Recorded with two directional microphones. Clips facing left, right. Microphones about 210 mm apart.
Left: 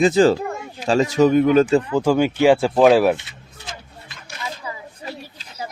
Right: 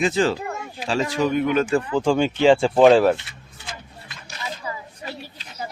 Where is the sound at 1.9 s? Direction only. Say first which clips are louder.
Left 2 dB; 10° left (ahead or behind).